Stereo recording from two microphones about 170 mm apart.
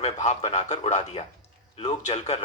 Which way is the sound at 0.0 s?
40° left (ahead or behind).